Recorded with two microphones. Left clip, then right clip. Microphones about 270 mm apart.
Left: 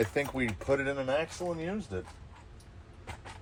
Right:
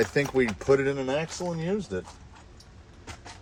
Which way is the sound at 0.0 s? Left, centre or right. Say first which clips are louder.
Right 6 dB; right.